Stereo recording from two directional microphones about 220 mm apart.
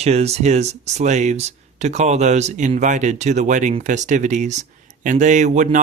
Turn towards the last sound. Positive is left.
turn(degrees=-35)  # may be behind; listen again after turning